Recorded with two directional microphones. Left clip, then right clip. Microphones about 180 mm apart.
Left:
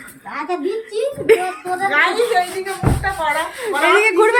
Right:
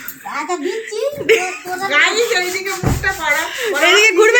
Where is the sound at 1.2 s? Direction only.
15° left (ahead or behind).